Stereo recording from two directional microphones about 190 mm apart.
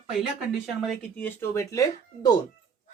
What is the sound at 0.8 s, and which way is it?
Speech, 5° left (ahead or behind).